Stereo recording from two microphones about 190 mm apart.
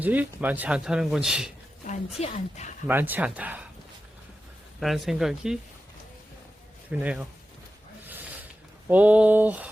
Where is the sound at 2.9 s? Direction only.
10° right (ahead or behind).